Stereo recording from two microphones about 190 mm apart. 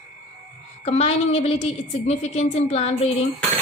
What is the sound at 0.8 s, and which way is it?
Speech, 35° left (ahead or behind).